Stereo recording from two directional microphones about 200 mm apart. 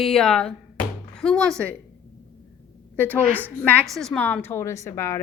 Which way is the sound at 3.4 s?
10° left (ahead or behind).